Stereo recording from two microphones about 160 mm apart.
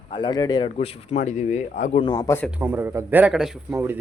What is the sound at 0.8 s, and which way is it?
Speech, 40° left (ahead or behind).